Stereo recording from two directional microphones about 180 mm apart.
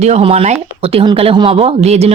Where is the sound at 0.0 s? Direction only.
35° right (ahead or behind).